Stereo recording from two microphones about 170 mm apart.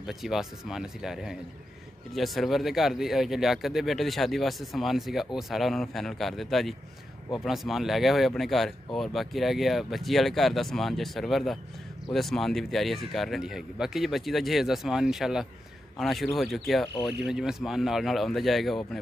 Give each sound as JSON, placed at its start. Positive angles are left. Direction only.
{"t": 0.0, "sound": "speech", "side_deg": 0}
{"t": 16.8, "sound": "speech", "side_deg": 25}
{"t": 17.2, "sound": "speech", "side_deg": -5}